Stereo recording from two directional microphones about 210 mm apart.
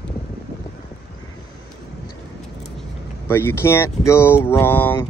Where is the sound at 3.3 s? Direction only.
10° left (ahead or behind).